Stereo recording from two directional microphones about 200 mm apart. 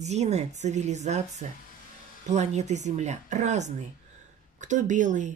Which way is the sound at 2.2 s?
35° right (ahead or behind).